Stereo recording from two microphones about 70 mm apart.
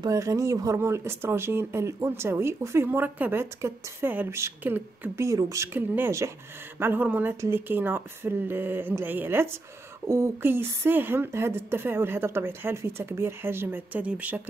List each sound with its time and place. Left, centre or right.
0.1 s a woman's voice: right
4.3 s a woman's voice: right
5.7 s speech: right
7.3 s a woman's voice: right